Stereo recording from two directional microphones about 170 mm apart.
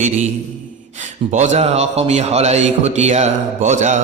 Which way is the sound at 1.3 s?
45° right (ahead or behind).